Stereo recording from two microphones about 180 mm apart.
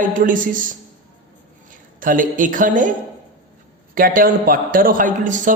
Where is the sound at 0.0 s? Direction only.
50° right (ahead or behind).